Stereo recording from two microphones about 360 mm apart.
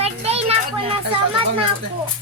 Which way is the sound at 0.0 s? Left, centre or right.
Centre.